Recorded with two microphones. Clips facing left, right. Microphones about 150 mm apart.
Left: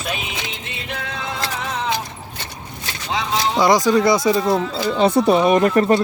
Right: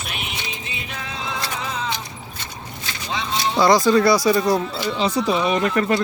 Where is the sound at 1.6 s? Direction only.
70° left (ahead or behind).